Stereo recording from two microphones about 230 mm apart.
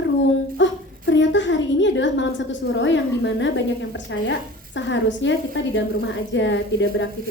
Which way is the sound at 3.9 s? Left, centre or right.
Left.